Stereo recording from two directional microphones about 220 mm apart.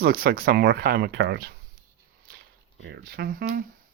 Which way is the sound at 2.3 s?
40° right (ahead or behind).